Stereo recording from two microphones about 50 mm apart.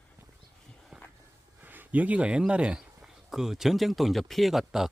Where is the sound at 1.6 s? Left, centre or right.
Right.